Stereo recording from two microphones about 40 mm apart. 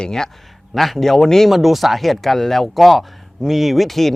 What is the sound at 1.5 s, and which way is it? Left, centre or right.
Speech, centre.